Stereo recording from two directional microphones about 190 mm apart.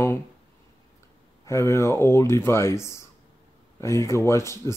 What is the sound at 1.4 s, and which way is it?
Speech, 15° left (ahead or behind).